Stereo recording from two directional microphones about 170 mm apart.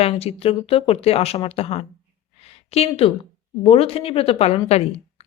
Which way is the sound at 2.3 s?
40° left (ahead or behind).